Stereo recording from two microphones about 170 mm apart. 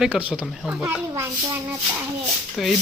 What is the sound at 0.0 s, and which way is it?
Speech, 10° right (ahead or behind).